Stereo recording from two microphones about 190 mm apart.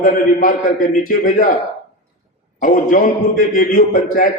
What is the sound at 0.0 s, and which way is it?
A man's voice, 45° left (ahead or behind).